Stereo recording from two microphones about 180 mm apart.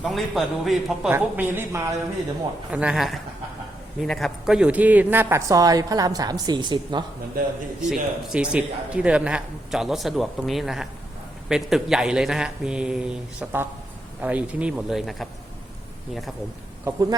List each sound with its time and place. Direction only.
0.0 s speech: centre (ahead or behind)
1.1 s a woman's voice: 10° right (ahead or behind)
7.8 s speech: 5° right (ahead or behind)
16.8 s a woman's voice: 20° right (ahead or behind)